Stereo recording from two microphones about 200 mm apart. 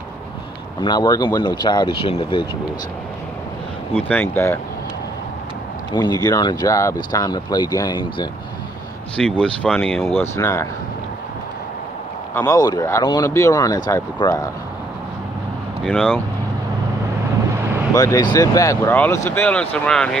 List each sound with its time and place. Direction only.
0.7 s speech: 20° left (ahead or behind)
4.1 s speech: 10° left (ahead or behind)
5.9 s speech: 20° left (ahead or behind)
9.1 s speech: 5° left (ahead or behind)
10.2 s speech: 15° left (ahead or behind)
12.4 s speech: 15° left (ahead or behind)
15.8 s speech: centre (ahead or behind)
17.9 s speech: 20° left (ahead or behind)